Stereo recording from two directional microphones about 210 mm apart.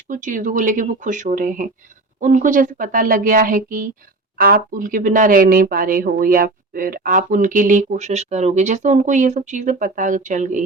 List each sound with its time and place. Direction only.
0.1 s speech: 40° right (ahead or behind)